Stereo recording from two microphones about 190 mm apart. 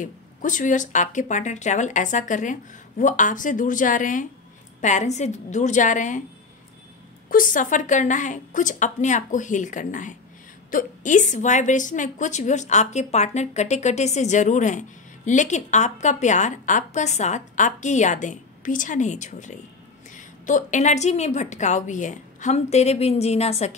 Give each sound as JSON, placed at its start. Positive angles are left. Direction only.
{"t": 0.0, "sound": "a woman's voice", "side_deg": 40}
{"t": 7.2, "sound": "a woman's voice", "side_deg": 45}